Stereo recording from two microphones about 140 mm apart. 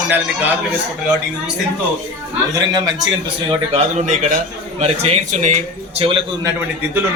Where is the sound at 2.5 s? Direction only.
30° right (ahead or behind).